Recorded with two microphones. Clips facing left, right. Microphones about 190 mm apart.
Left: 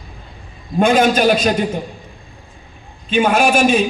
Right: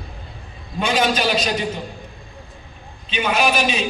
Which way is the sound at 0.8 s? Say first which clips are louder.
Left 7 dB; 50° left (ahead or behind).